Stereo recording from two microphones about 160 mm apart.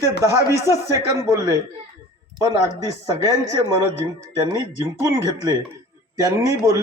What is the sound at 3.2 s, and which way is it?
A man's voice, 20° right (ahead or behind).